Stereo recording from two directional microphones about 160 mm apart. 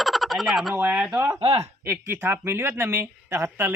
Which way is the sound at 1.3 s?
35° right (ahead or behind).